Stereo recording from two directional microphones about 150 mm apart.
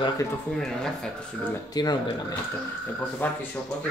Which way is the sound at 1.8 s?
25° left (ahead or behind).